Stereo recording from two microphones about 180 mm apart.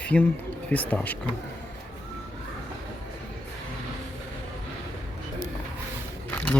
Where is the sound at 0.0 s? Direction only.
5° left (ahead or behind).